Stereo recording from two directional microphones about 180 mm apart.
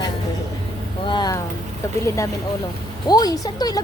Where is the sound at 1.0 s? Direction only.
25° left (ahead or behind).